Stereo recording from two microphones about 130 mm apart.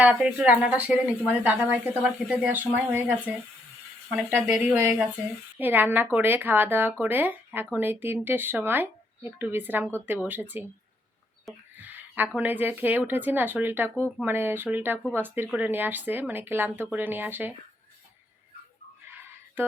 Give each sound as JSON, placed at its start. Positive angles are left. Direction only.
{"t": 0.0, "sound": "speech", "side_deg": -10}
{"t": 11.8, "sound": "a sound", "side_deg": -15}
{"t": 12.4, "sound": "speech", "side_deg": -15}